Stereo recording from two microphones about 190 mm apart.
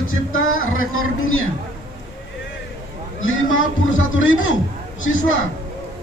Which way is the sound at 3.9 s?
90° left.